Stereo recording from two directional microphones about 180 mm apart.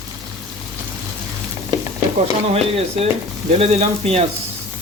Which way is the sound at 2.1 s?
35° right (ahead or behind).